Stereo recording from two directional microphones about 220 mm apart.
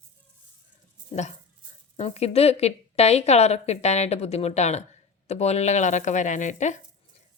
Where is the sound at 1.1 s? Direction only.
30° left (ahead or behind).